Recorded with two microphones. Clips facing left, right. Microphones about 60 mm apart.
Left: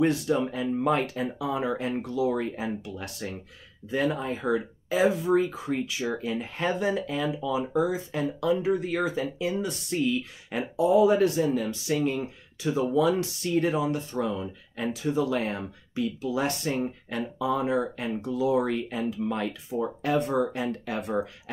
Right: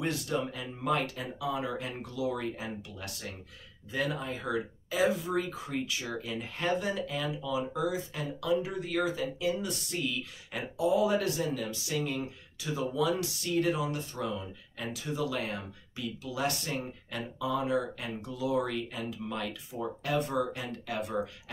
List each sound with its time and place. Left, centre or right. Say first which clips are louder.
0.0 s speech: left 8 dB; left